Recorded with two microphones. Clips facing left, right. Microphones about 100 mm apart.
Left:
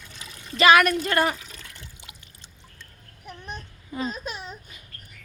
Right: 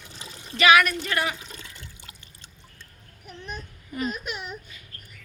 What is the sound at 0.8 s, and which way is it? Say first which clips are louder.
Speech: left 4 dB; 45° left (ahead or behind).